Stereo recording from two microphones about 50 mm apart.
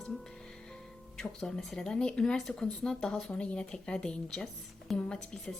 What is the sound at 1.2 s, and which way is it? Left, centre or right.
Speech, centre.